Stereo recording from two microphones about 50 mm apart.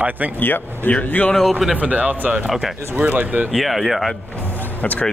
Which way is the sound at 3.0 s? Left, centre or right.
Right.